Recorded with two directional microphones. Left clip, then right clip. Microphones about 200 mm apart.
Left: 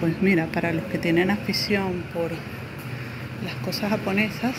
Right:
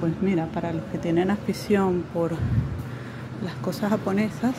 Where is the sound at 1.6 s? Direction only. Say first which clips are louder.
Right 2 dB; 25° right (ahead or behind).